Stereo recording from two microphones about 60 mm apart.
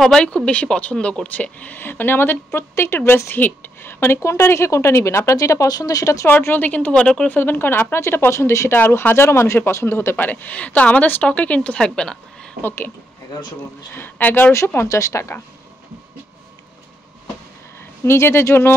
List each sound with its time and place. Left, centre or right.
0.0 s speech: centre
1.8 s speech: left
3.3 s speech: left
6.2 s speech: left
6.9 s speech: centre
7.2 s speech: left
8.0 s speech: left
8.7 s speech: left; by 12.2 s centre
12.6 s speech: left
13.9 s speech: left
14.9 s speech: left
18.0 s speech: left